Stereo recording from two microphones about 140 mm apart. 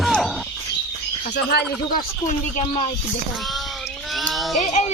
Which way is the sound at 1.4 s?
90° left.